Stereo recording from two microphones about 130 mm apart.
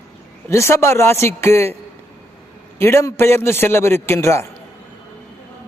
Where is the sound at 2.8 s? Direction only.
20° left (ahead or behind).